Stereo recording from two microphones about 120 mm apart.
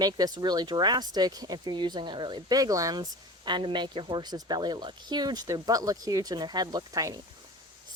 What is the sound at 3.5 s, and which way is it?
Speech, 40° right (ahead or behind).